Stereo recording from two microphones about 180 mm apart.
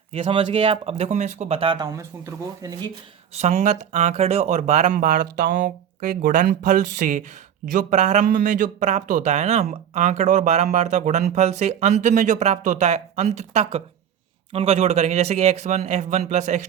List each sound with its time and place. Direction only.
0.1 s speech: 35° right (ahead or behind)
3.3 s speech: 40° right (ahead or behind)